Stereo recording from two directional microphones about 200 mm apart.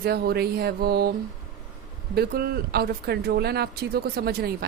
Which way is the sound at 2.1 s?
50° right (ahead or behind).